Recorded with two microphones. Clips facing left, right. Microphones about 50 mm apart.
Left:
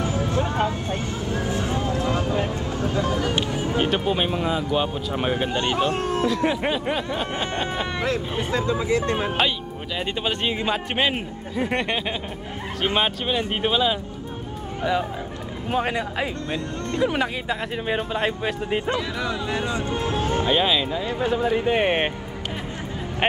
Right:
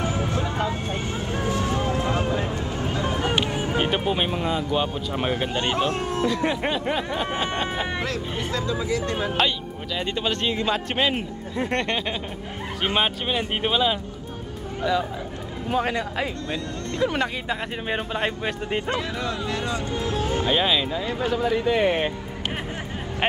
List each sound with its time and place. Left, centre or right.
0.0 s vehicle: right
0.4 s vehicle: left
0.7 s vehicle: right
2.4 s a sound: right
3.8 s a man's voice: centre
8.0 s speech: left
9.9 s a man's voice: centre
12.8 s a man's voice: centre
14.8 s a man's voice: left
16.4 s speech: left
17.0 s a man's voice: centre
19.4 s speech: centre; by 20.4 s left
20.4 s a man's voice: centre
21.0 s speech: left